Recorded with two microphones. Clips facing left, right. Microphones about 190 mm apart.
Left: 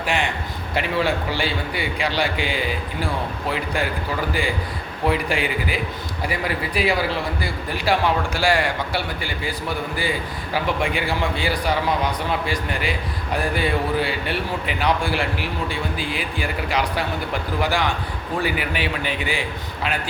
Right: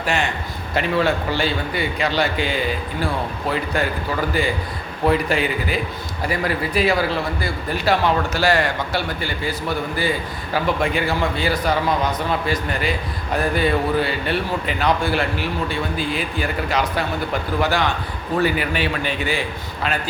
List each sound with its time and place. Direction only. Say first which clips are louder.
0.0 s a man's voice: right 1 dB; 15° left (ahead or behind)
5.0 s a man's voice: right 3 dB; 10° left (ahead or behind)
13.3 s a man's voice: right 3 dB; 10° left (ahead or behind)